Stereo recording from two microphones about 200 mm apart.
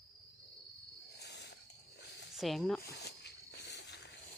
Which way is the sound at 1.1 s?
55° left (ahead or behind).